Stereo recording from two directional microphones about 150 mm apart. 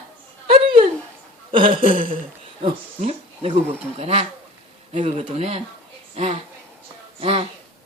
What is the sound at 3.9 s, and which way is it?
Speech, 40° right (ahead or behind).